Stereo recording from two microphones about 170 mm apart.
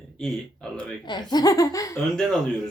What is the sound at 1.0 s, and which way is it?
Speech, 25° left (ahead or behind).